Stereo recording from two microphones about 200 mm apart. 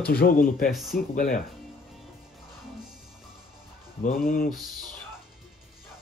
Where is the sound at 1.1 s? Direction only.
45° left (ahead or behind).